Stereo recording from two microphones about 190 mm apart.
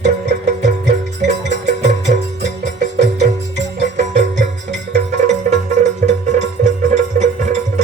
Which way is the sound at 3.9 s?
35° right (ahead or behind).